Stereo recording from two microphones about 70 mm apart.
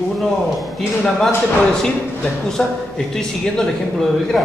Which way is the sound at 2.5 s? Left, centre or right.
Centre.